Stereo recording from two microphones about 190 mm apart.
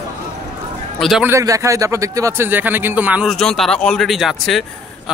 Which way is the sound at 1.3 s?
15° right (ahead or behind).